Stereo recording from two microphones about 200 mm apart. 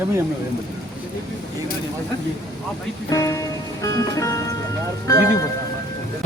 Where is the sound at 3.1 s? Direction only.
15° left (ahead or behind).